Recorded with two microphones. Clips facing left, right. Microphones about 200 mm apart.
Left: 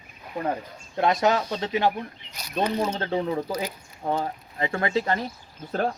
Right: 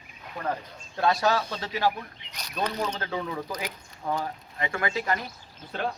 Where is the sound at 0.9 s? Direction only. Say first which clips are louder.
Left 3 dB; 20° left (ahead or behind).